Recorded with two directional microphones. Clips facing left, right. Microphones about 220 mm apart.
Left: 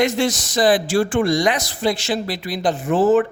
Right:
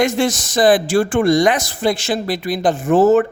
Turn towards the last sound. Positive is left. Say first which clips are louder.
# right 3 dB
turn(degrees=-45)  # may be behind; listen again after turning